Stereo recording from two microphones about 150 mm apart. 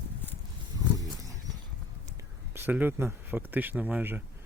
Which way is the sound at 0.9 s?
25° right (ahead or behind).